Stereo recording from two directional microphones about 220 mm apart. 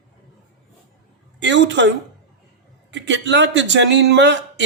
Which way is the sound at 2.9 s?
55° right (ahead or behind).